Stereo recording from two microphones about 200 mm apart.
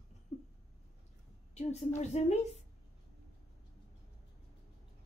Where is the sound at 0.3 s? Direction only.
35° left (ahead or behind).